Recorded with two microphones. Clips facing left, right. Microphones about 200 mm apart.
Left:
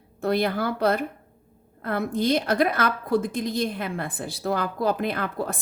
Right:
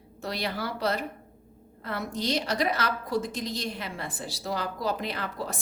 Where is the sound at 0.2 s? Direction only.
55° left (ahead or behind).